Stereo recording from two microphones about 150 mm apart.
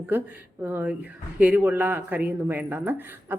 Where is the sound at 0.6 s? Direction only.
15° right (ahead or behind).